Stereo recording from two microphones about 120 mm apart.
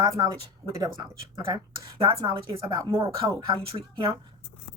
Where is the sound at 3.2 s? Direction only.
45° right (ahead or behind).